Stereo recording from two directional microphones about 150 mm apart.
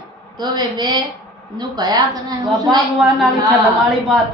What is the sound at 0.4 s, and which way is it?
A woman's voice, 30° right (ahead or behind).